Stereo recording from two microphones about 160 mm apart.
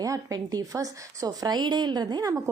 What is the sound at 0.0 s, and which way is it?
A woman's voice, 20° right (ahead or behind).